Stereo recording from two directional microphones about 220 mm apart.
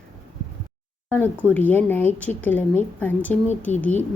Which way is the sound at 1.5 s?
5° left (ahead or behind).